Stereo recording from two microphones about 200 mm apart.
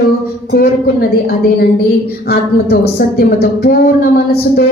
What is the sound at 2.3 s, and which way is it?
A woman's voice, 50° left (ahead or behind).